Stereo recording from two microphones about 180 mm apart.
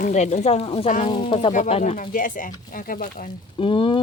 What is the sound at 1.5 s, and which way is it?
Speech, 40° left (ahead or behind).